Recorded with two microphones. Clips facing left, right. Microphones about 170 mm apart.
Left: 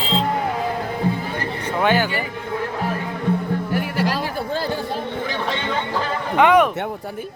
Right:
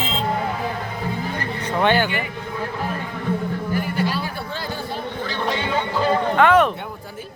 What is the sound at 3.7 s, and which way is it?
Music, 80° left.